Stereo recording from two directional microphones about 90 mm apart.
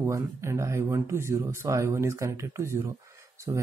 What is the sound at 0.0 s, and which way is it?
Speech, 30° right (ahead or behind).